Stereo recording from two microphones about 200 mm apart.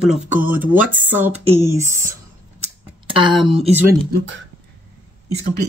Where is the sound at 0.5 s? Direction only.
10° right (ahead or behind).